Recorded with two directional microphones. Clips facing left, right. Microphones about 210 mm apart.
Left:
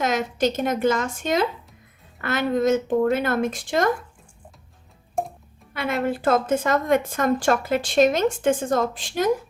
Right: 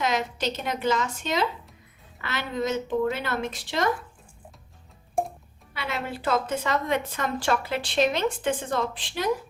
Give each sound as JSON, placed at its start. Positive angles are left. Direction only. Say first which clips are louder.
{"t": 0.0, "sound": "a woman's voice", "louder": "left 5 dB", "side_deg": 45}
{"t": 5.7, "sound": "a woman's voice", "louder": "left 8 dB", "side_deg": 50}